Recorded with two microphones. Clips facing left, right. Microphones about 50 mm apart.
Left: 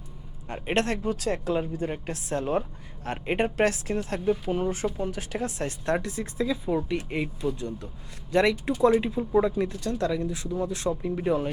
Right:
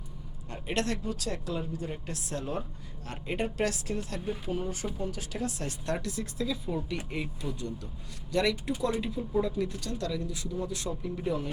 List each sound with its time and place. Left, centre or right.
0.4 s speech: left
8.3 s speech: left